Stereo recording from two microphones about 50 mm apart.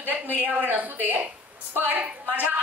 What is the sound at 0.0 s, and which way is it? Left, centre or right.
Speech, right.